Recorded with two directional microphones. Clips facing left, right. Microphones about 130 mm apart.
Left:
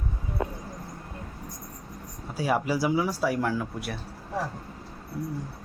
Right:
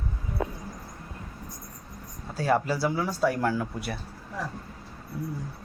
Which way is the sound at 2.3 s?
10° left (ahead or behind).